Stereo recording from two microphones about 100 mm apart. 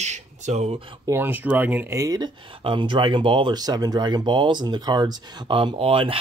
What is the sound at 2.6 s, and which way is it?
Speech, 55° right (ahead or behind).